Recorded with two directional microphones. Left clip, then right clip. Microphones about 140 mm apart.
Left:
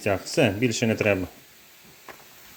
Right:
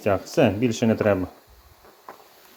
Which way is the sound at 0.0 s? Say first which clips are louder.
Right 2 dB; centre (ahead or behind).